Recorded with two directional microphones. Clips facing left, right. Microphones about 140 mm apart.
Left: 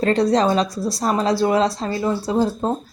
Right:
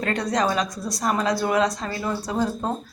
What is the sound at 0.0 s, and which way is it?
A woman's voice, 30° left (ahead or behind).